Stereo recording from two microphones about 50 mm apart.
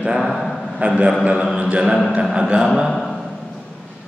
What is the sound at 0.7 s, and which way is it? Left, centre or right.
A man's voice, right.